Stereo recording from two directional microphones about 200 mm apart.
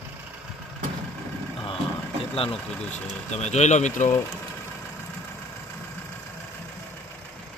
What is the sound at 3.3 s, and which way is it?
Speech, 35° left (ahead or behind).